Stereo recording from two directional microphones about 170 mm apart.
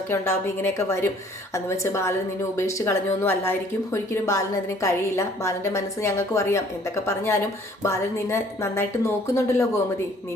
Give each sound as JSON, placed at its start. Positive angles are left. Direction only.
{"t": 0.1, "sound": "a woman's voice", "side_deg": 15}